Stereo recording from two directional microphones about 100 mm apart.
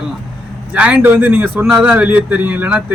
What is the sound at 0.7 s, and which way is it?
A man's voice, 15° right (ahead or behind).